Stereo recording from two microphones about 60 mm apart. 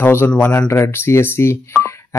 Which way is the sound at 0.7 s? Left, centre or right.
Left.